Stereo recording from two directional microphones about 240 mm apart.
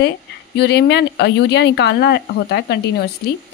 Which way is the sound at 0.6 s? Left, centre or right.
Left.